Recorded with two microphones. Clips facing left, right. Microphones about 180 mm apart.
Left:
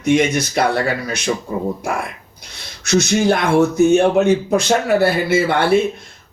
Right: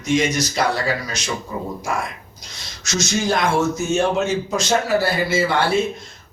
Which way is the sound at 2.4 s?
60° left (ahead or behind).